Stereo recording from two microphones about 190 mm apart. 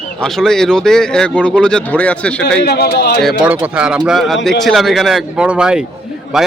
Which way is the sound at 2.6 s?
55° left (ahead or behind).